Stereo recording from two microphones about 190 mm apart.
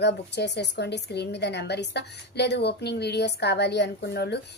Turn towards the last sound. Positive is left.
turn(degrees=60)  # may be behind; listen again after turning